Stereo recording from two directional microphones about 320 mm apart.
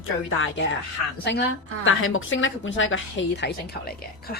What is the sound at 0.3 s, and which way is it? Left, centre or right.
A woman's voice, left.